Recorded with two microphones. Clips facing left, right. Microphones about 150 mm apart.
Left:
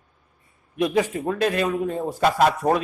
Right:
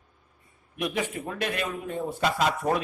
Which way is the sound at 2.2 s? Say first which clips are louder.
Left 7 dB; 50° left (ahead or behind).